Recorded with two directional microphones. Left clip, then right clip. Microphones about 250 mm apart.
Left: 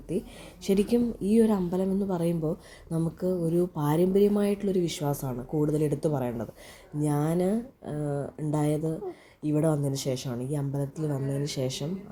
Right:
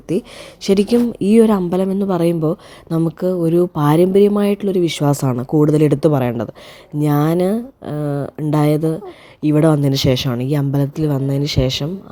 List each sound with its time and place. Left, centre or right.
0.6 s a woman's voice: right